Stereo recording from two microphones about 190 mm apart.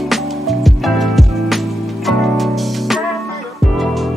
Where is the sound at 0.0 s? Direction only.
Centre (ahead or behind).